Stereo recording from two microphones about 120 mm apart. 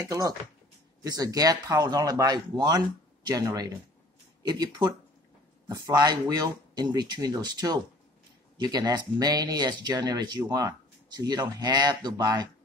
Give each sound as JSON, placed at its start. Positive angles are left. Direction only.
{"t": 0.0, "sound": "speech", "side_deg": -30}
{"t": 4.4, "sound": "speech", "side_deg": -35}